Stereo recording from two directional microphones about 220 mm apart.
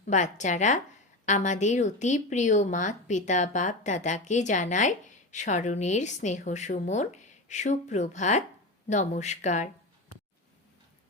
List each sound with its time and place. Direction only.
0.0 s a woman's voice: 35° left (ahead or behind)